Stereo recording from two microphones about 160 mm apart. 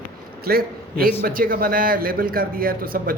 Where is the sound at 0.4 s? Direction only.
70° right (ahead or behind).